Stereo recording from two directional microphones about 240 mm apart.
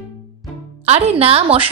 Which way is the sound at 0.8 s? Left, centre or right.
Right.